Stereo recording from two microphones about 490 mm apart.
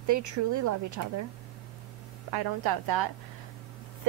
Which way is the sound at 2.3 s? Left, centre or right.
Right.